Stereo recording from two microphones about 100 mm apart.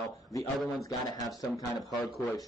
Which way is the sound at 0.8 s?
35° left (ahead or behind).